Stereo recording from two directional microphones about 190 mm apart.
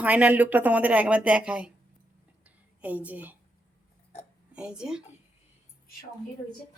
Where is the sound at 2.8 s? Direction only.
10° right (ahead or behind).